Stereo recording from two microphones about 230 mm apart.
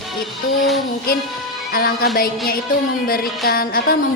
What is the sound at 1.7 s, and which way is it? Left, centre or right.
A woman's voice, left.